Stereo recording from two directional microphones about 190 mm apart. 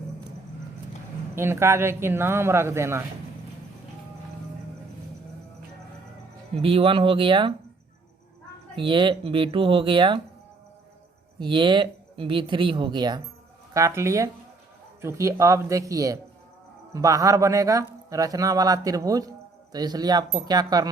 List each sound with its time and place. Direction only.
1.4 s speech: 15° right (ahead or behind)
6.6 s speech: 30° right (ahead or behind)
8.7 s speech: 25° right (ahead or behind)
11.3 s speech: 25° right (ahead or behind)